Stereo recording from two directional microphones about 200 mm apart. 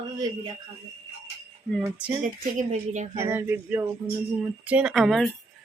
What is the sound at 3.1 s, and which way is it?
Speech, 10° right (ahead or behind).